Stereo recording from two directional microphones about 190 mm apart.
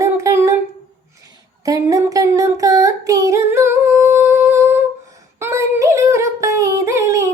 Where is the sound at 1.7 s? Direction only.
15° right (ahead or behind).